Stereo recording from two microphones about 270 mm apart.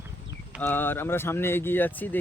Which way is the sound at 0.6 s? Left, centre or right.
Centre.